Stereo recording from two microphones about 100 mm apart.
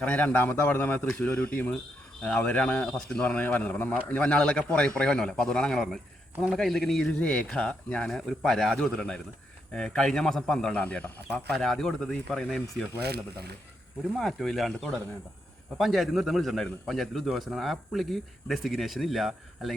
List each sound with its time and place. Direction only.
0.0 s a man's voice: 15° left (ahead or behind)
8.1 s a man's voice: centre (ahead or behind)
14.2 s a man's voice: centre (ahead or behind)